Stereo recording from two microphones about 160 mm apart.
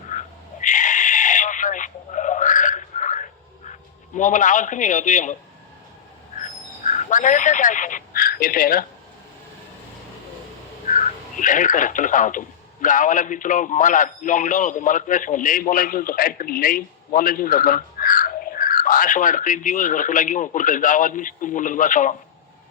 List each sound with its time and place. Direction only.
0.1 s a sound: 50° left (ahead or behind)
4.1 s a man's voice: 50° left (ahead or behind)
6.8 s speech: 50° left (ahead or behind)
10.9 s speech: 55° left (ahead or behind)